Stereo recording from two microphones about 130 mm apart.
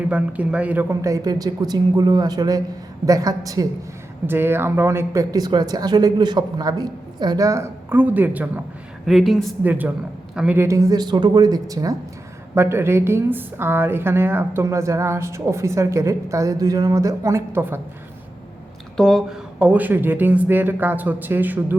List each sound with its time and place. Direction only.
0.0 s speech: 10° right (ahead or behind)
1.0 s a woman's voice: 25° right (ahead or behind)
4.3 s a woman's voice: 15° right (ahead or behind)
9.0 s speech: centre (ahead or behind)
9.6 s a woman's voice: 15° right (ahead or behind)
10.6 s a woman's voice: 25° right (ahead or behind)
18.9 s speech: centre (ahead or behind)
19.5 s speech: 10° right (ahead or behind)